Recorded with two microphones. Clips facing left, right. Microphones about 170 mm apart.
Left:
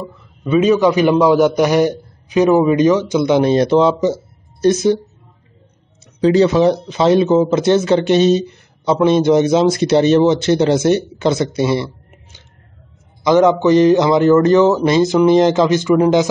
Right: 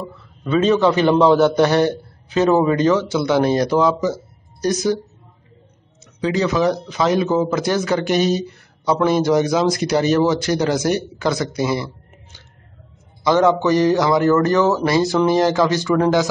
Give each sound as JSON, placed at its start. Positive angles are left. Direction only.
{"t": 0.4, "sound": "a man's voice", "side_deg": 10}
{"t": 6.2, "sound": "speech", "side_deg": 30}